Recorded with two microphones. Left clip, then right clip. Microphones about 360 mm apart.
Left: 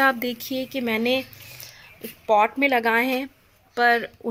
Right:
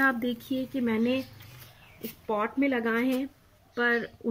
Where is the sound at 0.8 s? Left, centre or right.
Centre.